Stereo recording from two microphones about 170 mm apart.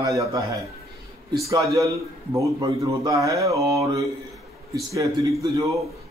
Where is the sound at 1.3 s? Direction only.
20° right (ahead or behind).